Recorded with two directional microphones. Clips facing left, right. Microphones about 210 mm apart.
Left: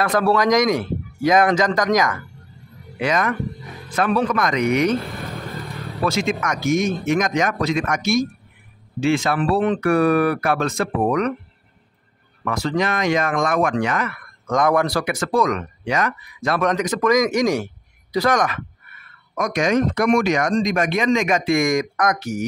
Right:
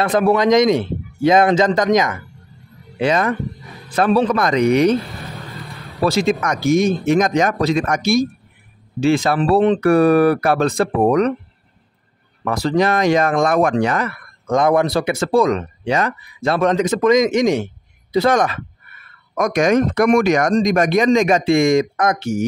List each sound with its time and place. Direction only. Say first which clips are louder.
0.0 s speech: right 3 dB; 20° right (ahead or behind)
6.0 s speech: right 5 dB; 35° right (ahead or behind)
12.4 s speech: right 5 dB; 35° right (ahead or behind)
19.3 s speech: right 4 dB; 50° right (ahead or behind); by 22.4 s 25° right (ahead or behind)